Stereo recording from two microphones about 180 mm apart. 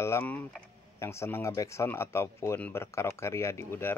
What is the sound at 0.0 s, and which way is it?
Speech, 10° left (ahead or behind).